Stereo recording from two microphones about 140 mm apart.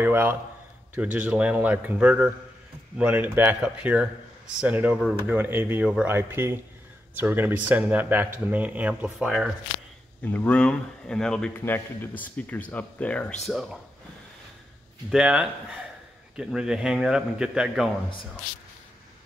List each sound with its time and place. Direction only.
0.0 s a man's voice: 15° right (ahead or behind)
10.2 s speech: 10° left (ahead or behind)
15.0 s a man's voice: 5° right (ahead or behind)